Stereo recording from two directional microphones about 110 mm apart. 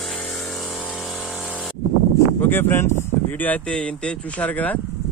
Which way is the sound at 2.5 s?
20° left (ahead or behind).